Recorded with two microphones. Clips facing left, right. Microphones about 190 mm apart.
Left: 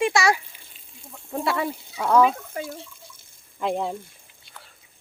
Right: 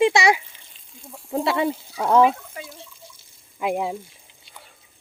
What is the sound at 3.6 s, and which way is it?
Speech, 5° right (ahead or behind).